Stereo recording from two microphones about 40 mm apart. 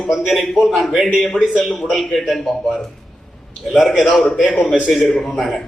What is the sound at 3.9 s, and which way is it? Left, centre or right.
Speech, centre.